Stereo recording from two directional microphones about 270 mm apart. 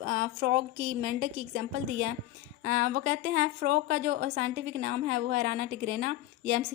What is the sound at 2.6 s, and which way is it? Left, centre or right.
A woman's voice, right.